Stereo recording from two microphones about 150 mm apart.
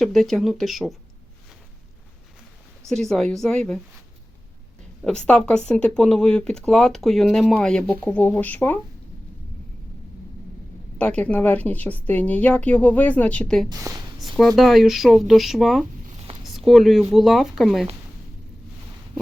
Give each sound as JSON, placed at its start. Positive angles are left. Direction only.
{"t": 0.0, "sound": "speech", "side_deg": 0}
{"t": 2.9, "sound": "speech", "side_deg": 0}
{"t": 5.0, "sound": "speech", "side_deg": 5}
{"t": 10.9, "sound": "a woman's voice", "side_deg": 10}
{"t": 13.7, "sound": "speech", "side_deg": -25}
{"t": 14.2, "sound": "speech", "side_deg": 0}
{"t": 16.0, "sound": "a sound", "side_deg": -45}
{"t": 16.4, "sound": "speech", "side_deg": 0}